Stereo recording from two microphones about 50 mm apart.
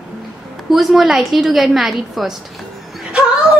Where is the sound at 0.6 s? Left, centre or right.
Centre.